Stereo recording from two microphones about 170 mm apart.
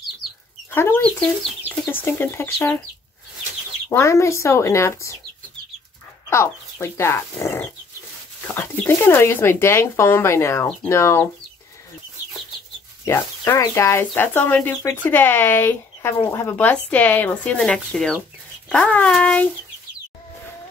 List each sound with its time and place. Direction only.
0.7 s speech: 15° left (ahead or behind)
3.9 s speech: 15° left (ahead or behind)
6.3 s speech: 15° left (ahead or behind)
13.0 s a child's voice: 15° left (ahead or behind)